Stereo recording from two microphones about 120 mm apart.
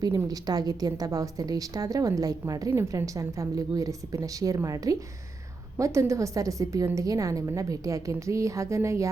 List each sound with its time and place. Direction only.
0.3 s a woman's voice: 35° right (ahead or behind)